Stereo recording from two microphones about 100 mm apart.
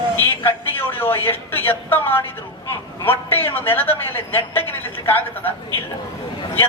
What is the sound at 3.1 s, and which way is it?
A man's voice, 20° left (ahead or behind).